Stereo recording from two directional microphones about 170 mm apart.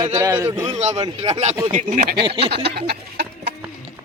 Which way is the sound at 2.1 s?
30° right (ahead or behind).